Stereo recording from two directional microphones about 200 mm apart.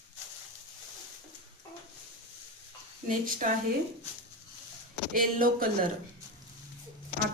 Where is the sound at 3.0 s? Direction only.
40° right (ahead or behind).